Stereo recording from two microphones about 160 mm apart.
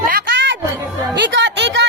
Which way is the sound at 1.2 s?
90° right.